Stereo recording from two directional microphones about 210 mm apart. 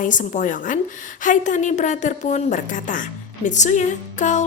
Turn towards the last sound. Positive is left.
turn(degrees=35)  # may be behind; listen again after turning